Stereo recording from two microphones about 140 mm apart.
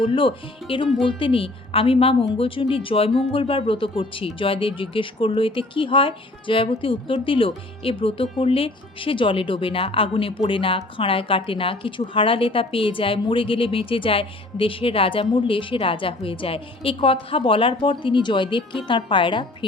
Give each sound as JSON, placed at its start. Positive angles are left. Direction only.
{"t": 0.0, "sound": "a woman's voice", "side_deg": 40}